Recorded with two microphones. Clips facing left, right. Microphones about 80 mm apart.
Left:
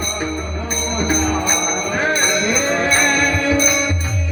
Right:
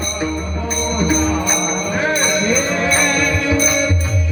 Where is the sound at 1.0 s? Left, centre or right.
Left.